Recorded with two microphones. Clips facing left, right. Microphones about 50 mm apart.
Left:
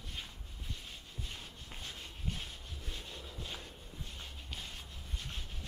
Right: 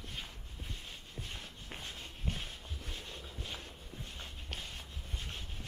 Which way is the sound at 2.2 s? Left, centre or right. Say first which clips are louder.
Right 2 dB; right.